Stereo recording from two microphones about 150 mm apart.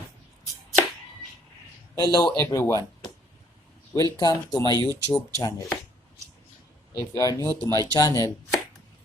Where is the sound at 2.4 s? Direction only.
20° left (ahead or behind).